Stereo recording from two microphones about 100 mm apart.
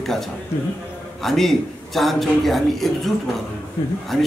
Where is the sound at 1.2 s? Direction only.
Centre (ahead or behind).